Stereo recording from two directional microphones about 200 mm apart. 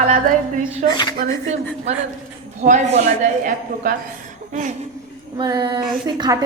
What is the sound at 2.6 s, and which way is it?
A woman's voice, 35° right (ahead or behind).